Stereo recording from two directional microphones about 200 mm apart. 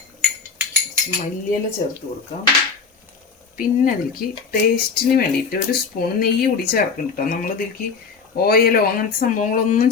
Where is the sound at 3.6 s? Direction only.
45° left (ahead or behind).